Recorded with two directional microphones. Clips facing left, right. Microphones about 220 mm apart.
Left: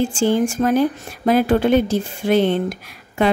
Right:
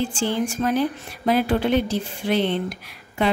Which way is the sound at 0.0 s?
45° left (ahead or behind).